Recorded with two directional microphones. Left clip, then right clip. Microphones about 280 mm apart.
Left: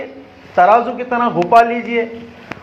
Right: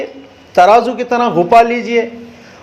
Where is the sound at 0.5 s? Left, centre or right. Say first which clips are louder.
Right 3 dB; right.